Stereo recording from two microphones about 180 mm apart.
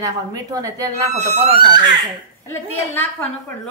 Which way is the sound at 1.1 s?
40° right (ahead or behind).